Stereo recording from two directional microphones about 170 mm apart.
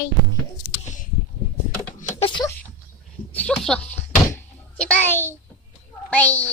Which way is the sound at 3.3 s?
5° left (ahead or behind).